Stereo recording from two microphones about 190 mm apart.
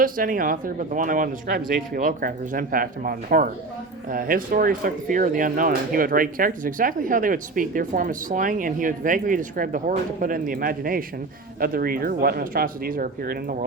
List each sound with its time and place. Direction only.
0.0 s speech: 45° right (ahead or behind)